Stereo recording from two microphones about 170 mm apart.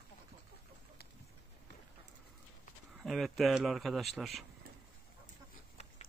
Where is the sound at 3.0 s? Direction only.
Centre (ahead or behind).